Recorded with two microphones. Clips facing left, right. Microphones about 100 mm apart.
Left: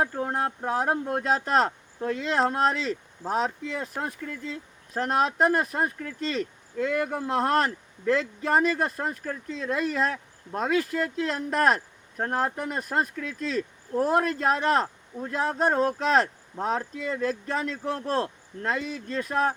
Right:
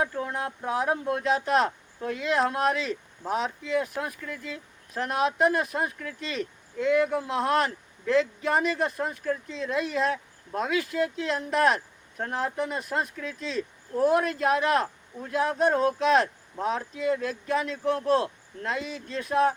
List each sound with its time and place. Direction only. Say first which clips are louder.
0.0 s speech: left 2 dB; 40° left (ahead or behind)